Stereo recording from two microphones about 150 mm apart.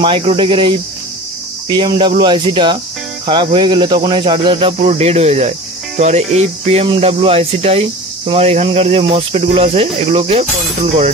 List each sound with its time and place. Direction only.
0.0 s speech: 40° right (ahead or behind)